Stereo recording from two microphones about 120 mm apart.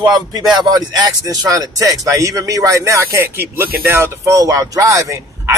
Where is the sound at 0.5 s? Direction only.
35° right (ahead or behind).